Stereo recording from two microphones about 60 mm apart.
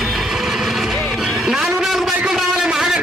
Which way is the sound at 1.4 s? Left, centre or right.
Centre.